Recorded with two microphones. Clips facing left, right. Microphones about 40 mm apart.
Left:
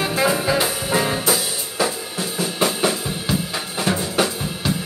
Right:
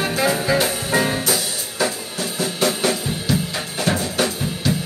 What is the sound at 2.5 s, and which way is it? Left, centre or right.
Drum, left.